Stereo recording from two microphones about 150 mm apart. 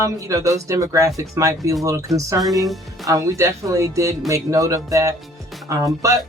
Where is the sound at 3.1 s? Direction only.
20° right (ahead or behind).